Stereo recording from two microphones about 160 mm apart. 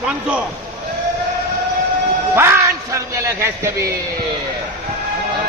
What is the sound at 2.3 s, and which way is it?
A man's voice, 15° right (ahead or behind).